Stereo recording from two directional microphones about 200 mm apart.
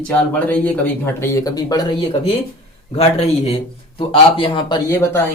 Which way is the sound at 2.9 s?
30° left (ahead or behind).